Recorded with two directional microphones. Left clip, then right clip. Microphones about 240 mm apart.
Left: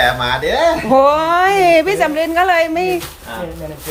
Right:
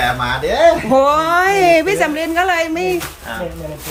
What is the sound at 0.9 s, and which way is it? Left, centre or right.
A woman's voice, centre.